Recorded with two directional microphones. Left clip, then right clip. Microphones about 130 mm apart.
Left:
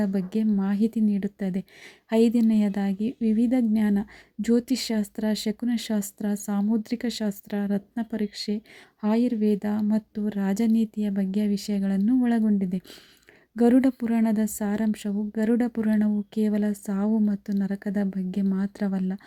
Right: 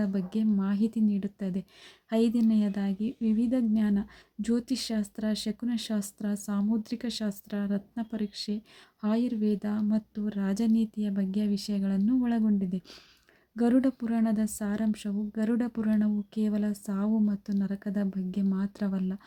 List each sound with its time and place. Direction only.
0.0 s a woman's voice: 25° left (ahead or behind)